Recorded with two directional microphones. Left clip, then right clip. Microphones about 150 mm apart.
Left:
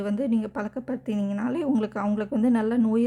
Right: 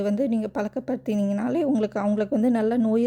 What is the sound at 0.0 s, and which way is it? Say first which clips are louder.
A woman's voice: right 3 dB; 20° right (ahead or behind).